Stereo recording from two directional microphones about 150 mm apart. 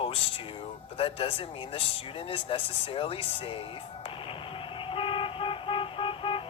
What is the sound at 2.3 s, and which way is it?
Speech, 35° left (ahead or behind).